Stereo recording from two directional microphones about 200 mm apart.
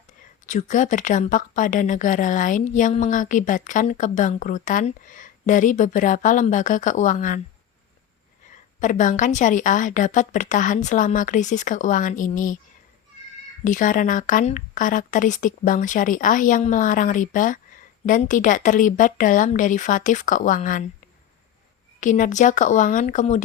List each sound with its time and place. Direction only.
0.4 s a woman's voice: 40° left (ahead or behind)
8.8 s a woman's voice: 40° left (ahead or behind)
13.7 s a woman's voice: 40° left (ahead or behind)
22.0 s a woman's voice: 40° left (ahead or behind)